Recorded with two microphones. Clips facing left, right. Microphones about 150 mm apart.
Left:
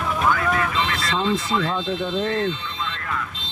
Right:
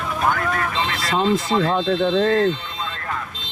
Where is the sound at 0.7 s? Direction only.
35° right (ahead or behind).